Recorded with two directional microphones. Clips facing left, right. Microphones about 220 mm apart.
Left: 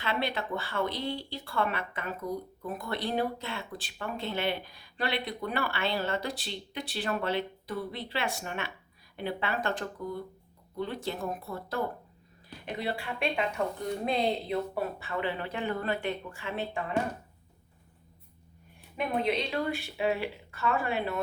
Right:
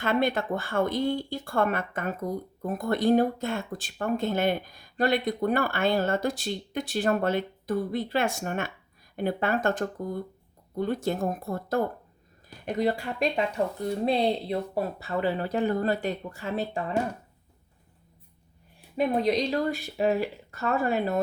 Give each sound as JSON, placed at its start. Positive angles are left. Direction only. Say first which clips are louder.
{"t": 0.0, "sound": "speech", "louder": "right 7 dB", "side_deg": -50}
{"t": 18.9, "sound": "speech", "louder": "right 5 dB", "side_deg": -40}